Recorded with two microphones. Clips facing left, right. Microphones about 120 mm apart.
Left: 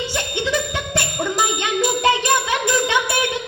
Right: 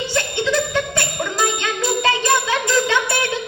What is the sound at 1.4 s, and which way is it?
Jingle bell, 15° left (ahead or behind).